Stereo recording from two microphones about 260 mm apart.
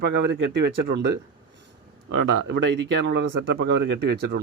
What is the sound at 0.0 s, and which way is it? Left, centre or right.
Speech, right.